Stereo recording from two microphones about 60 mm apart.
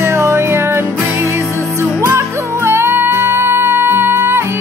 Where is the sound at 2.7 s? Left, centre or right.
Right.